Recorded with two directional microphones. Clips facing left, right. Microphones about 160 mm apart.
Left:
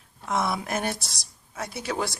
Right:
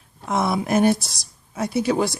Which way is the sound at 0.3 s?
30° right (ahead or behind).